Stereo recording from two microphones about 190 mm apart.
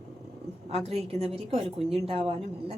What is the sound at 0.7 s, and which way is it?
Speech, 35° right (ahead or behind).